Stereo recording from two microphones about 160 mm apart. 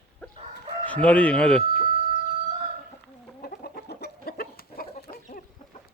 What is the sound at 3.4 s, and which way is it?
Chicken, 75° left (ahead or behind).